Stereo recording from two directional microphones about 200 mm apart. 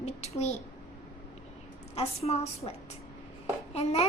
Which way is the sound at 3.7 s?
30° left (ahead or behind).